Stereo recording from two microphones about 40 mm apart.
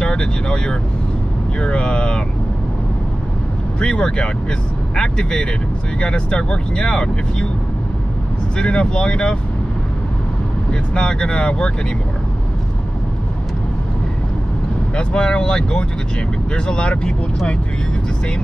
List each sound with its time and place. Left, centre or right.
0.0 s speech: left
3.8 s speech: left
8.5 s speech: left
10.7 s speech: left
15.0 s speech: left